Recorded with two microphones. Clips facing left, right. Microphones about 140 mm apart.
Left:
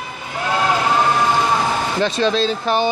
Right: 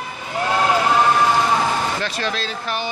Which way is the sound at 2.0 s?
25° left (ahead or behind).